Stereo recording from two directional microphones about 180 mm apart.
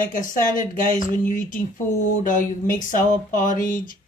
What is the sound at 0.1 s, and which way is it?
Speech, 45° left (ahead or behind).